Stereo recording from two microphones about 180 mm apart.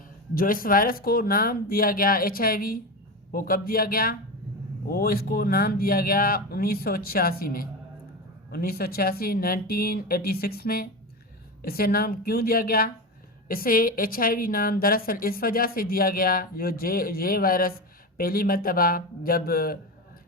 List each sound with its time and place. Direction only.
0.3 s a woman's voice: 50° left (ahead or behind)